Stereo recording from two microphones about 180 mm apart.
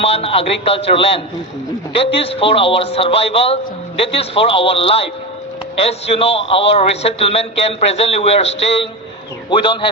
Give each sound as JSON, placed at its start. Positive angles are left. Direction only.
{"t": 0.0, "sound": "a man's voice", "side_deg": 35}